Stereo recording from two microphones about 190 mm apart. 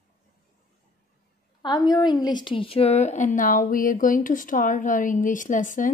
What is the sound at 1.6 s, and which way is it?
A woman's voice, 20° left (ahead or behind).